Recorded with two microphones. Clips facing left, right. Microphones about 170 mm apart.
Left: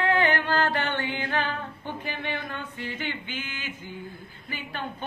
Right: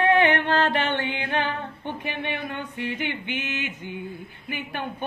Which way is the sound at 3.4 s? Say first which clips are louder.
Right 6 dB; 65° right (ahead or behind).